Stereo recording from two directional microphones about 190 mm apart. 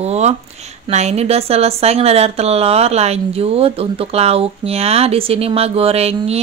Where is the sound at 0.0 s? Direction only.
35° right (ahead or behind).